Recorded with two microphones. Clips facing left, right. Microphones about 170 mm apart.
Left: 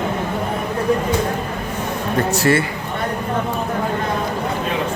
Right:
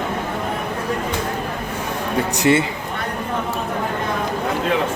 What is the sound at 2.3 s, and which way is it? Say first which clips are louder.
Speech: right 1 dB; 20° right (ahead or behind).